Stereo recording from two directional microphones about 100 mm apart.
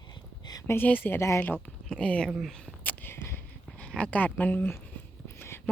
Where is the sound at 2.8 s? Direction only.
20° left (ahead or behind).